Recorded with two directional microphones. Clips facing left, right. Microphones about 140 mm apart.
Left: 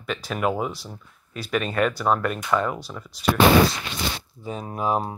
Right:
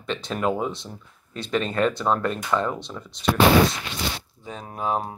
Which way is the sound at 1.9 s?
10° left (ahead or behind).